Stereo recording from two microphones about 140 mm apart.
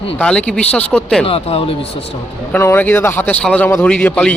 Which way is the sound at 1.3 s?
40° left (ahead or behind).